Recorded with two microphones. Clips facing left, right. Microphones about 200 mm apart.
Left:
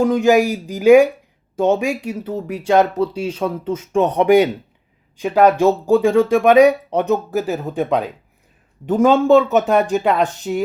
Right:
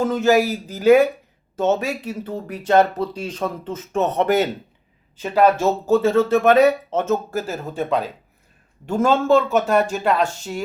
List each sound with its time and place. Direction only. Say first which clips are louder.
0.0 s speech: left 3 dB; 15° left (ahead or behind)
10.0 s speech: left 2 dB; centre (ahead or behind)
10.2 s speech: left 3 dB; 20° left (ahead or behind)